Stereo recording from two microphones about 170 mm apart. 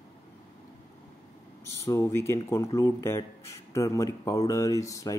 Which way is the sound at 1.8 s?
15° left (ahead or behind).